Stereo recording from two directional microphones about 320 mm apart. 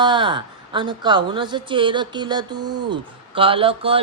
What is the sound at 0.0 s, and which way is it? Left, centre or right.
A woman's voice, centre.